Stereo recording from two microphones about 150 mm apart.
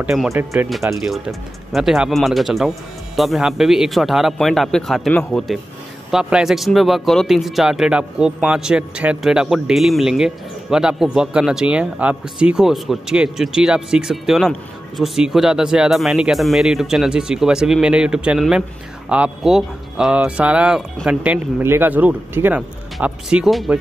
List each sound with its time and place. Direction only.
0.0 s speech: centre (ahead or behind)
0.3 s speech: 15° right (ahead or behind)
0.7 s speech: centre (ahead or behind)